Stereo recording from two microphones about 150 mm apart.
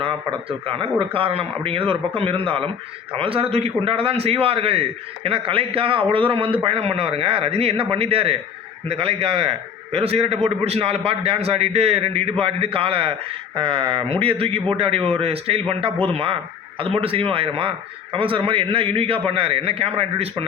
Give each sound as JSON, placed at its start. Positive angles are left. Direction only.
{"t": 0.0, "sound": "a man's voice", "side_deg": -35}